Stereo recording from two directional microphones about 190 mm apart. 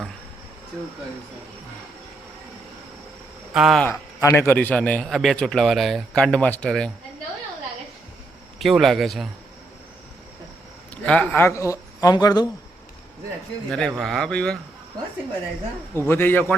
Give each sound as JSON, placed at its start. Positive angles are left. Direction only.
{"t": 3.5, "sound": "a man's voice", "side_deg": 0}
{"t": 3.8, "sound": "a man's voice", "side_deg": 15}
{"t": 8.5, "sound": "a man's voice", "side_deg": 0}
{"t": 11.0, "sound": "a man's voice", "side_deg": 5}
{"t": 13.7, "sound": "a man's voice", "side_deg": 5}
{"t": 16.0, "sound": "a man's voice", "side_deg": 10}